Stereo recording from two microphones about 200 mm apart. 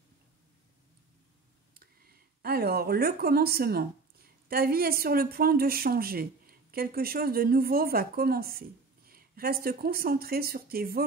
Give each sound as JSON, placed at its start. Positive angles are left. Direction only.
{"t": 1.7, "sound": "speech", "side_deg": -50}